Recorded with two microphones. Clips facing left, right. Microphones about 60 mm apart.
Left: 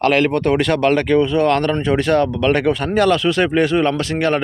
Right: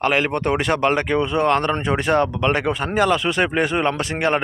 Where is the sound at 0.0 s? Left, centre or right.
Centre.